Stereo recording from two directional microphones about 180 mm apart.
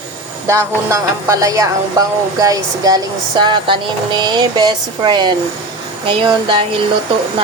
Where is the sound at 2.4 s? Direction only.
20° right (ahead or behind).